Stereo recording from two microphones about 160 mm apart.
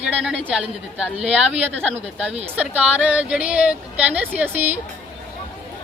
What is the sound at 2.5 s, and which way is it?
Speech, 10° right (ahead or behind).